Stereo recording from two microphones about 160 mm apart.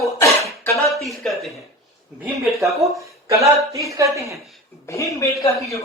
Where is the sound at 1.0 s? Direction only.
Centre (ahead or behind).